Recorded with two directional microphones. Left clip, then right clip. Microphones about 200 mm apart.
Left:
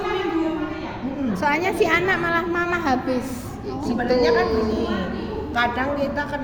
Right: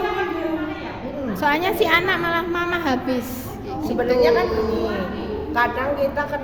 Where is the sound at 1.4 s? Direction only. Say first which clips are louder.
Right 1 dB; 10° right (ahead or behind).